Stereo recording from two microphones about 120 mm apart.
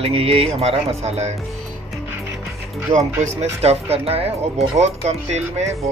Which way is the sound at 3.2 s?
65° right (ahead or behind).